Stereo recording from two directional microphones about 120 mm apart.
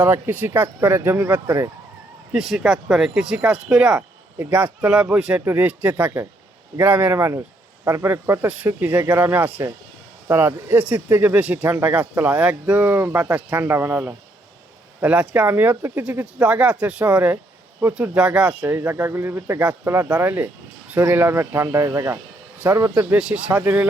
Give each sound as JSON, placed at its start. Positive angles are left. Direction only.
{"t": 0.0, "sound": "speech", "side_deg": -15}
{"t": 2.3, "sound": "speech", "side_deg": -5}
{"t": 23.1, "sound": "speech", "side_deg": -10}